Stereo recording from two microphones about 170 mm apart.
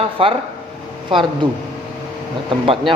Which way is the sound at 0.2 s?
35° right (ahead or behind).